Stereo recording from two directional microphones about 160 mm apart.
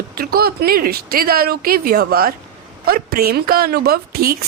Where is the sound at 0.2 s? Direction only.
70° right (ahead or behind).